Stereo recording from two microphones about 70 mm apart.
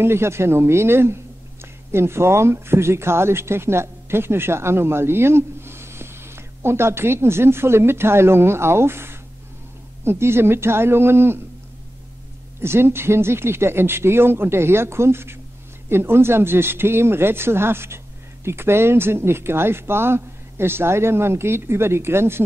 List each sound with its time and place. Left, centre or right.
0.0 s speech: right
12.5 s speech: right